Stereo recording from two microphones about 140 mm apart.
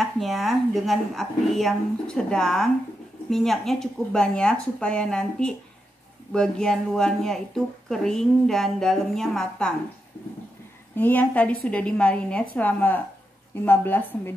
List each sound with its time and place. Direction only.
0.0 s speech: centre (ahead or behind)
11.0 s a woman's voice: 10° left (ahead or behind)